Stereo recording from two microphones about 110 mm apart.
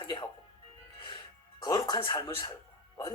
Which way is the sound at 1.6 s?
40° left (ahead or behind).